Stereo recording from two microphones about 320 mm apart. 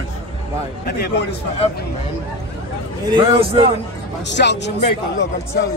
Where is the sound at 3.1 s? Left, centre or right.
Centre.